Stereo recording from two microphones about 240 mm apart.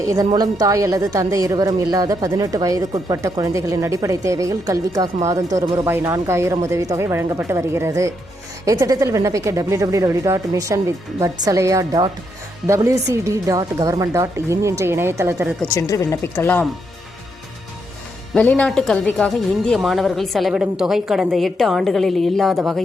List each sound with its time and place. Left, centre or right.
0.0 s speech: centre
15.7 s speech: centre
18.3 s a woman's voice: centre